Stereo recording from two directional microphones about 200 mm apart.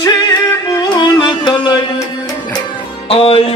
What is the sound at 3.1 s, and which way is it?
Music, 30° left (ahead or behind).